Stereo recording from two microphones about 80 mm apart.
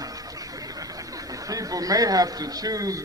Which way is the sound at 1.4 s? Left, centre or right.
Right.